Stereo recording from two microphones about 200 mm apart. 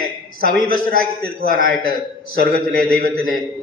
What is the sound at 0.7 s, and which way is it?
A man's voice, 45° right (ahead or behind).